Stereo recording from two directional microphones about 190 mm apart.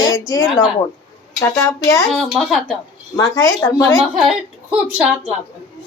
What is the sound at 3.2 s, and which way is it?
Speech, 15° left (ahead or behind).